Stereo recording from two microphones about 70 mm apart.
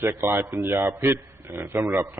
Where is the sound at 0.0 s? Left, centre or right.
Right.